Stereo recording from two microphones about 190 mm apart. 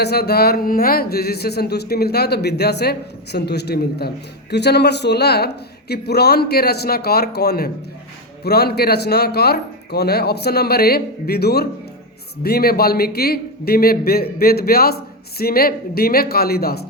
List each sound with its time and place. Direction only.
0.0 s a man's voice: 55° left (ahead or behind)